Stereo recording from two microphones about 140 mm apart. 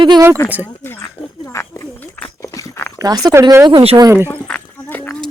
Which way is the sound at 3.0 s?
25° right (ahead or behind).